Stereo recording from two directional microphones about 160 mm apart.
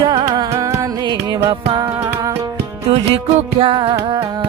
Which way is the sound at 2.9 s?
35° right (ahead or behind).